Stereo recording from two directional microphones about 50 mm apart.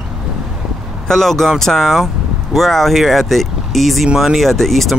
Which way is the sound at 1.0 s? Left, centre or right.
Centre.